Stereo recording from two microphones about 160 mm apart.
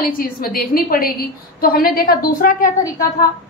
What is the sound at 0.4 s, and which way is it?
A woman's voice, 65° left (ahead or behind).